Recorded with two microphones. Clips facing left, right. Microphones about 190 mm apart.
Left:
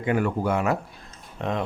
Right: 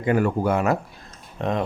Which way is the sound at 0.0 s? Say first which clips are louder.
Right 3 dB; 40° right (ahead or behind).